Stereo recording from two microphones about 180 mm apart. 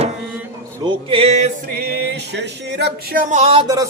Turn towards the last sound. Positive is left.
turn(degrees=-20)  # may be behind; listen again after turning